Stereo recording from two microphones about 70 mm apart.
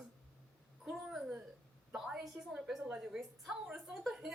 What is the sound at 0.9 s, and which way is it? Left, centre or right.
A woman's voice, centre.